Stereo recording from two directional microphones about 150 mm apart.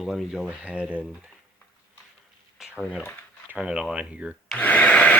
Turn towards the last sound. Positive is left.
turn(degrees=10)  # may be behind; listen again after turning